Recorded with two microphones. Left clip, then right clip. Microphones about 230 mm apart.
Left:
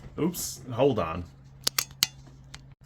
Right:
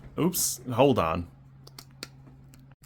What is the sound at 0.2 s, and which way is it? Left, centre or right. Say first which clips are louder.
Speech: right 2 dB; right.